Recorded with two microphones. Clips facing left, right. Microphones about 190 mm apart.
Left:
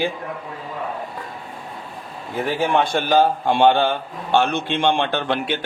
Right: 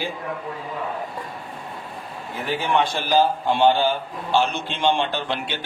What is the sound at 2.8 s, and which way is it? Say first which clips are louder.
A man's voice: left 3 dB; 55° left (ahead or behind).